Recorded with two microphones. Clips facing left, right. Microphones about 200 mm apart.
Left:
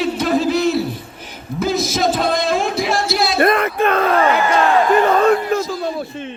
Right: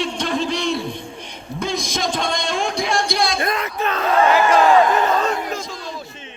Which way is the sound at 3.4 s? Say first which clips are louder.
Left 7 dB; 55° left (ahead or behind).